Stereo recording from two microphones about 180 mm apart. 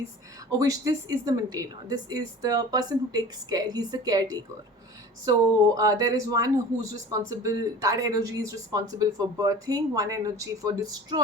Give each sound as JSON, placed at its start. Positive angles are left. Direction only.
{"t": 0.6, "sound": "speech", "side_deg": -20}